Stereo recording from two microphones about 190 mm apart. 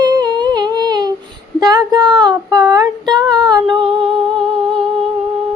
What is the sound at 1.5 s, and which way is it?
Speech, 20° right (ahead or behind).